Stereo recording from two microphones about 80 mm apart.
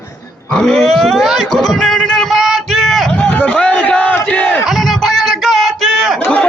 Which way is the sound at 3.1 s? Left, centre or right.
Centre.